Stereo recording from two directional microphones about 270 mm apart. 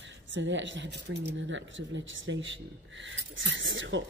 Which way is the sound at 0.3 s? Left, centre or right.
Right.